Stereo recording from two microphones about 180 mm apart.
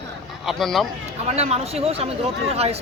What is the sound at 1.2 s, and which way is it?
Speech, 35° right (ahead or behind).